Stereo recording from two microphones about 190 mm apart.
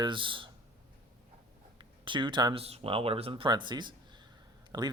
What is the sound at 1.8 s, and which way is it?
Speech, 25° right (ahead or behind).